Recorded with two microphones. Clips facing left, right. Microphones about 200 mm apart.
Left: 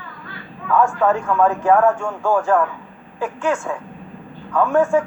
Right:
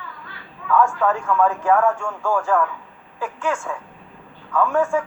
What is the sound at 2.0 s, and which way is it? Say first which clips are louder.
Speech: left 3 dB; 25° left (ahead or behind).